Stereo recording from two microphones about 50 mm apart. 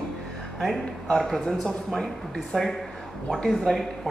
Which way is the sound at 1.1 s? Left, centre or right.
Centre.